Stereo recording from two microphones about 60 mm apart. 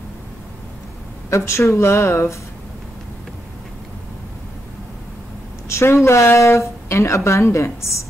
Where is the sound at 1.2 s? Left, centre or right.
Left.